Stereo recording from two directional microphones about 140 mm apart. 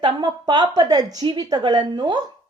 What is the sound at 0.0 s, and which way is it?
A woman's voice, 30° right (ahead or behind).